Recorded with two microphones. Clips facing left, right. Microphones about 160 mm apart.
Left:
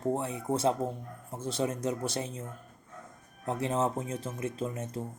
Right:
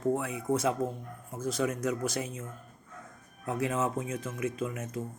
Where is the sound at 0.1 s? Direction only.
30° left (ahead or behind).